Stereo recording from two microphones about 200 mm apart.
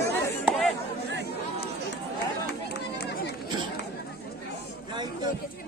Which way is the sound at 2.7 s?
55° left (ahead or behind).